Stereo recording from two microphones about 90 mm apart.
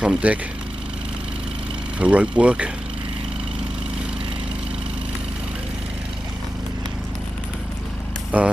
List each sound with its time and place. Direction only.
0.0 s speech: 15° right (ahead or behind)
2.0 s speech: 15° right (ahead or behind)
8.3 s speech: 15° right (ahead or behind)